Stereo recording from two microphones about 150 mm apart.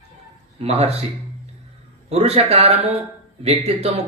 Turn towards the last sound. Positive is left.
turn(degrees=-40)  # may be behind; listen again after turning